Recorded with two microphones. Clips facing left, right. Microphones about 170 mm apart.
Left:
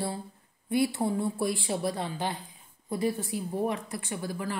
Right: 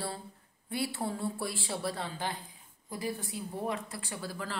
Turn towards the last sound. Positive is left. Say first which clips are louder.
# left 5 dB
turn(degrees=15)  # may be behind; listen again after turning